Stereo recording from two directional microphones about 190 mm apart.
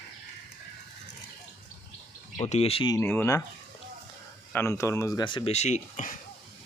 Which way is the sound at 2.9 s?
10° left (ahead or behind).